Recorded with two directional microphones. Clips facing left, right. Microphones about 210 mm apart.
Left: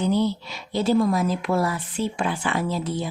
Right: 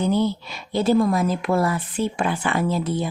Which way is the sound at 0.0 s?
55° right (ahead or behind).